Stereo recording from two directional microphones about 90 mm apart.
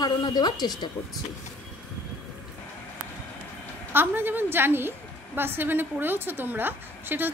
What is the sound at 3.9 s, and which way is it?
A woman's voice, 25° right (ahead or behind).